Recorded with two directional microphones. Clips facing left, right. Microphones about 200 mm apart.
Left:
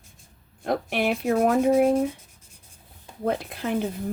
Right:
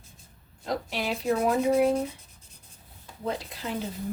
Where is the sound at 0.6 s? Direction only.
60° left (ahead or behind).